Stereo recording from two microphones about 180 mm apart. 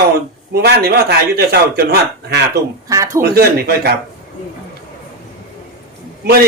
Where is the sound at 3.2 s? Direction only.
60° right (ahead or behind).